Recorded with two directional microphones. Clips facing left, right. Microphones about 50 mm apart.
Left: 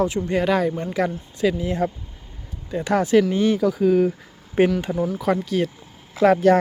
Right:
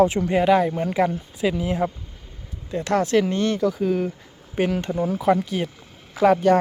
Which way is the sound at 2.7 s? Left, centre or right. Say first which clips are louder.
Left 2 dB; centre.